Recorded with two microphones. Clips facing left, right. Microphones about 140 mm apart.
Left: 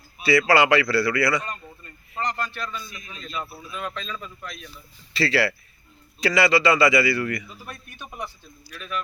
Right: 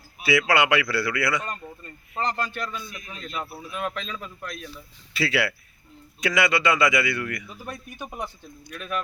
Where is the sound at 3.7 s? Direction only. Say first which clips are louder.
Right 2 dB; 55° right (ahead or behind).